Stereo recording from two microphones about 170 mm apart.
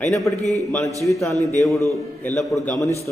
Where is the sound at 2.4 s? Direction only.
Centre (ahead or behind).